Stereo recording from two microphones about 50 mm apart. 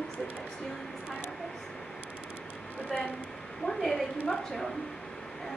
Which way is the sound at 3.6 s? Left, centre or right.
Centre.